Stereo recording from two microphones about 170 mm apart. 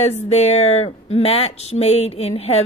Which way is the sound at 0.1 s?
40° left (ahead or behind).